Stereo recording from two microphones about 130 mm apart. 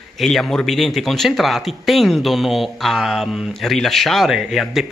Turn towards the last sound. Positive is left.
turn(degrees=0)  # may be behind; listen again after turning